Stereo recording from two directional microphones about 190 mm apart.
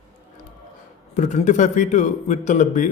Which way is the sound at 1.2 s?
40° left (ahead or behind).